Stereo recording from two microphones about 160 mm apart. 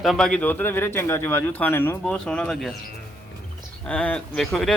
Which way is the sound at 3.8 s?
5° left (ahead or behind).